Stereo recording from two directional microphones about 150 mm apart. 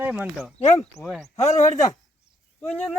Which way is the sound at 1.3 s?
50° left (ahead or behind).